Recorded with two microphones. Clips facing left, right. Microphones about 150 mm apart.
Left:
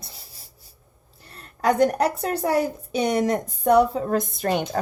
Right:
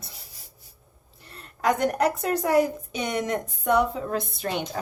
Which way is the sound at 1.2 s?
35° left (ahead or behind).